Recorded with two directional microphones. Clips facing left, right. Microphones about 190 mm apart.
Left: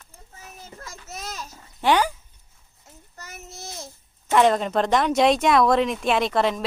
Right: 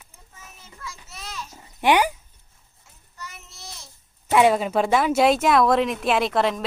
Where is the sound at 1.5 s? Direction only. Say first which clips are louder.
Right 1 dB; 15° right (ahead or behind).